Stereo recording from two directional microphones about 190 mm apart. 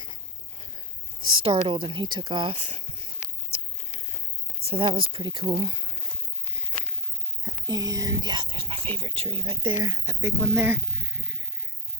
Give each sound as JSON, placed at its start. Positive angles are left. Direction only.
{"t": 1.4, "sound": "speech", "side_deg": -30}
{"t": 4.6, "sound": "speech", "side_deg": -30}
{"t": 7.4, "sound": "speech", "side_deg": -20}